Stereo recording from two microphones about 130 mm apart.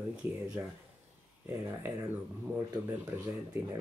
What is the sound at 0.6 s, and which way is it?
Speech, 20° right (ahead or behind).